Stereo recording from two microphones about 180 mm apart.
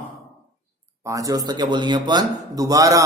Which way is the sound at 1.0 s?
20° right (ahead or behind).